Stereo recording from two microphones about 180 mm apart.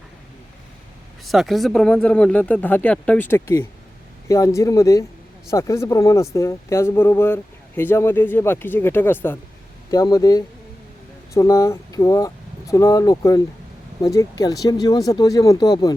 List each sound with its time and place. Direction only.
1.2 s speech: centre (ahead or behind); by 16.0 s 20° left (ahead or behind)